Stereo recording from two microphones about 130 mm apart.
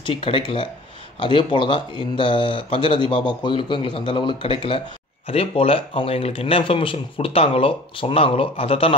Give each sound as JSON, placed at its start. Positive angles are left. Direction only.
{"t": 0.0, "sound": "speech", "side_deg": 45}